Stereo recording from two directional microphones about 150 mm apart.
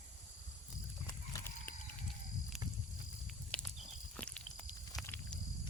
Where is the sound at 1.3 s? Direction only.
15° left (ahead or behind).